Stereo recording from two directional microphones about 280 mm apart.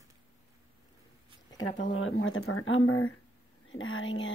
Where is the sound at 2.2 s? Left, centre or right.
Left.